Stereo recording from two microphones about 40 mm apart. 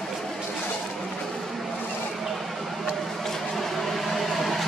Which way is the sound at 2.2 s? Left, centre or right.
Centre.